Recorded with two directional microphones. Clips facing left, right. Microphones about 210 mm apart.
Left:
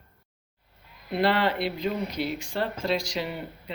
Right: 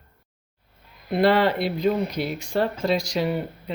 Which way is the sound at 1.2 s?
45° right (ahead or behind).